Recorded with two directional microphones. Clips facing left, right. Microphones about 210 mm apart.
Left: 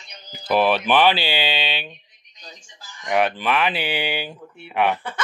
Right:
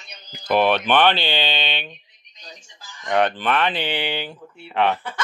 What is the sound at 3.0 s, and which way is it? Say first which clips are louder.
Speech: right 1 dB; 10° left (ahead or behind).